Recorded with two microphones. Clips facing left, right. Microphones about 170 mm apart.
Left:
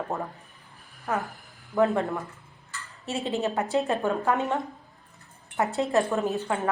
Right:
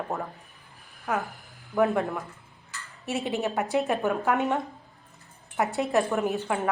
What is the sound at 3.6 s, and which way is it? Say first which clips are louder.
Speech: right 1 dB; 15° right (ahead or behind).